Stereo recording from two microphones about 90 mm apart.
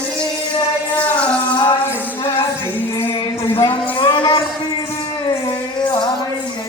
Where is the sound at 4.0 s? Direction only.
55° left (ahead or behind).